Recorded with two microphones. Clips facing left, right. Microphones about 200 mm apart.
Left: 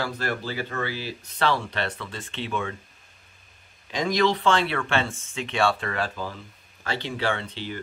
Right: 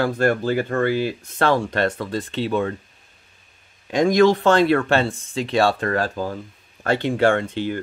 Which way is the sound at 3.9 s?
50° right (ahead or behind).